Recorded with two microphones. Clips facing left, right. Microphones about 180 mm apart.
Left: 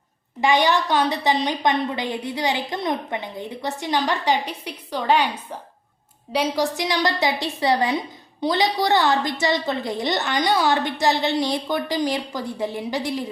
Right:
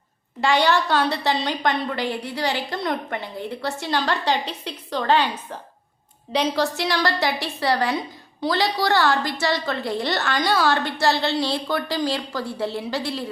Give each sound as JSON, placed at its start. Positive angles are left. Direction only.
{"t": 0.4, "sound": "a woman's voice", "side_deg": 15}